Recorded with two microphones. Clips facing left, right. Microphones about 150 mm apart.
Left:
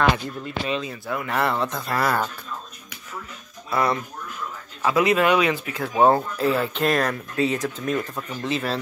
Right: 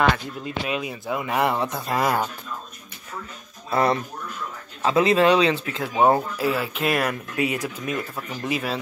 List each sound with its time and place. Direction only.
0.7 s speech: 10° right (ahead or behind)
3.7 s speech: 30° right (ahead or behind)
6.0 s speech: 10° right (ahead or behind)